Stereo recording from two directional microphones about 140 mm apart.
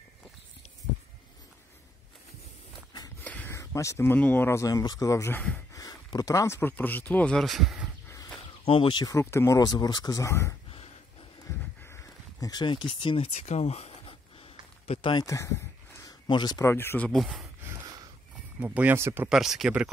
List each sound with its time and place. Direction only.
3.2 s a sound: 15° left (ahead or behind)
3.5 s speech: 20° left (ahead or behind); by 7.9 s 5° right (ahead or behind)
8.6 s speech: 40° left (ahead or behind)
9.1 s speech: 20° left (ahead or behind)
11.8 s a sound: 20° left (ahead or behind)
15.2 s speech: 20° left (ahead or behind)
17.1 s speech: centre (ahead or behind)
18.6 s speech: 10° right (ahead or behind)
19.2 s speech: 5° right (ahead or behind)